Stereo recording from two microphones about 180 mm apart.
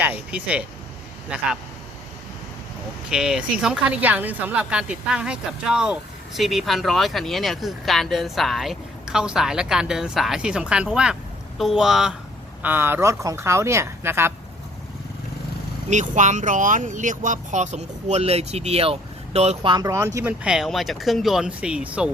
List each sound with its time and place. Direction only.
0.0 s speech: 5° right (ahead or behind)
3.1 s speech: 5° right (ahead or behind)
15.9 s speech: 40° right (ahead or behind)
19.7 s speech: 20° right (ahead or behind)
20.4 s speech: 5° right (ahead or behind)